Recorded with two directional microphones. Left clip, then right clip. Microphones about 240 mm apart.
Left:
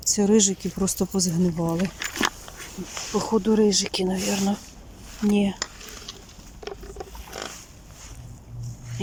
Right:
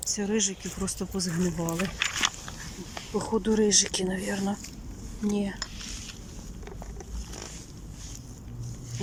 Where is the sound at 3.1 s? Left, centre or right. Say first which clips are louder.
Left 5 dB; centre.